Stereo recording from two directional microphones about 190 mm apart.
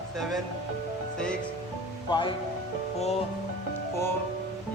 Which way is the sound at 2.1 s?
25° left (ahead or behind).